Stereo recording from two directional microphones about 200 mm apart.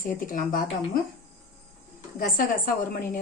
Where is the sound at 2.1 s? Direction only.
45° left (ahead or behind).